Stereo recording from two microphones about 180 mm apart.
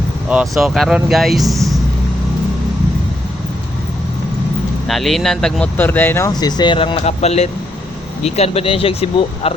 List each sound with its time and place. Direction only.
0.3 s speech: 5° right (ahead or behind)
4.9 s speech: centre (ahead or behind); by 9.5 s 35° left (ahead or behind)